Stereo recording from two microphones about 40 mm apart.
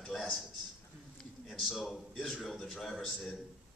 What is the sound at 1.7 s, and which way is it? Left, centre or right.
Speech, centre.